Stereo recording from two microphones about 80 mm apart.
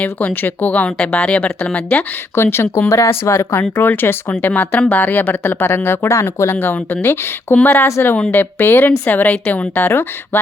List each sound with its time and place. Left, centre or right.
0.0 s speech: left